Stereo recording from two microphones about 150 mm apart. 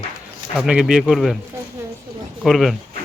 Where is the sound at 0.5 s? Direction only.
5° right (ahead or behind).